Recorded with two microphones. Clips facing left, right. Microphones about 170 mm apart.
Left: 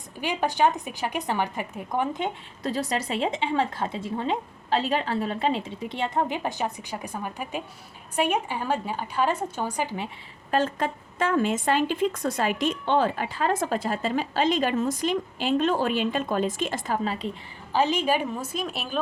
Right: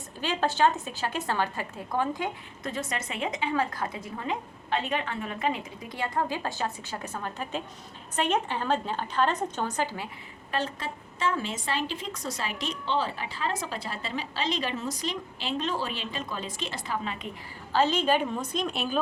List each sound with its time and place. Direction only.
0.2 s a woman's voice: 15° left (ahead or behind)
2.7 s a woman's voice: 35° left (ahead or behind); by 10.1 s 15° left (ahead or behind)
10.5 s a woman's voice: 50° left (ahead or behind)
17.7 s a woman's voice: 15° left (ahead or behind)